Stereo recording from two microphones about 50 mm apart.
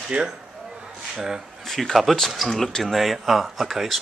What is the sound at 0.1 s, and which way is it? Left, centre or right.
Speech, right.